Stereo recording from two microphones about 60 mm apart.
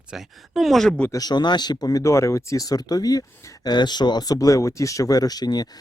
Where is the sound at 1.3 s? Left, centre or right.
Left.